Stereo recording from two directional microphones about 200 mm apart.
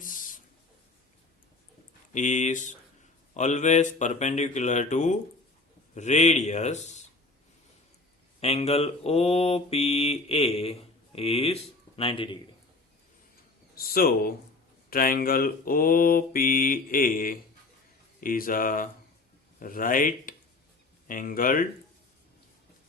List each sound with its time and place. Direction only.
0.0 s a sound: 40° left (ahead or behind)
2.1 s mantra: 35° left (ahead or behind)
8.4 s mantra: 30° left (ahead or behind)
13.7 s mantra: 50° left (ahead or behind)